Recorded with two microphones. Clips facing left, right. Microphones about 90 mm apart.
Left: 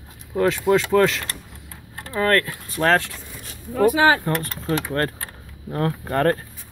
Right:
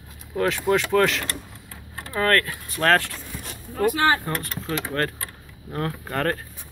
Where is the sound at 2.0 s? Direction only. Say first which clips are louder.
Left 2 dB; 15° left (ahead or behind).